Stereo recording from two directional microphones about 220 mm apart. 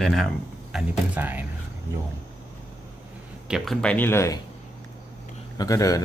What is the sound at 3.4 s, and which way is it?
Speech, centre (ahead or behind).